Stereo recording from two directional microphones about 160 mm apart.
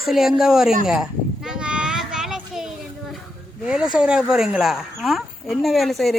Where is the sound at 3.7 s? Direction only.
5° right (ahead or behind).